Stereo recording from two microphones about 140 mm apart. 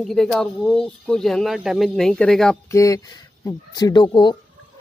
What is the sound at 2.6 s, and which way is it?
Speech, 25° left (ahead or behind).